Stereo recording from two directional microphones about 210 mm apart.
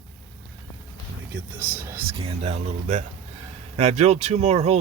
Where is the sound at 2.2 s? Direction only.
30° right (ahead or behind).